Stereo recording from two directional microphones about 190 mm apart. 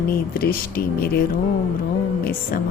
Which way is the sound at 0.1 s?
55° left (ahead or behind).